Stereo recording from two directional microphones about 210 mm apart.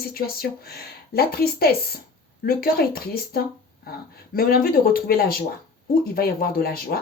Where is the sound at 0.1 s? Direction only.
45° left (ahead or behind).